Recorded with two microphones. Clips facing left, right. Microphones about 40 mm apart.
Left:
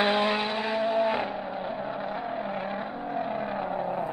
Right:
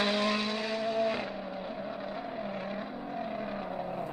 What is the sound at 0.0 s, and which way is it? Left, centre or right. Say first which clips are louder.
Vehicle: left 5 dB; left.